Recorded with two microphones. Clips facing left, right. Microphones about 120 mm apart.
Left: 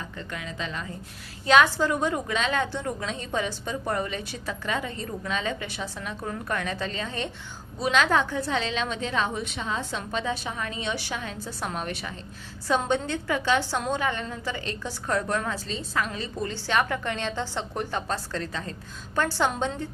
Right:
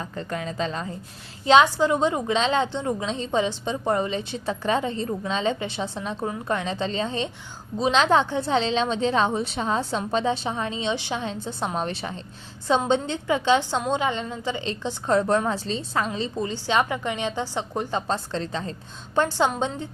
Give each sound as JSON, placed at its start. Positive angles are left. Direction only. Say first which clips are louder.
{"t": 0.0, "sound": "a woman's voice", "louder": "right 6 dB", "side_deg": -35}
{"t": 1.6, "sound": "a woman's voice", "louder": "right 4 dB", "side_deg": -20}